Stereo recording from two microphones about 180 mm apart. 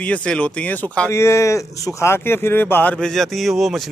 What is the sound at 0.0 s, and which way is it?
Speech, 5° left (ahead or behind).